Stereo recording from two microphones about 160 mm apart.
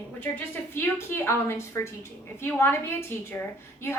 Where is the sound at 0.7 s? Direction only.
15° left (ahead or behind).